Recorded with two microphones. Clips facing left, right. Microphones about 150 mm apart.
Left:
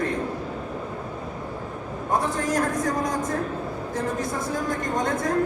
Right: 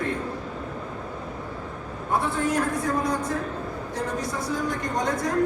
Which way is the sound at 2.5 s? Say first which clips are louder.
Left 1 dB; 40° left (ahead or behind).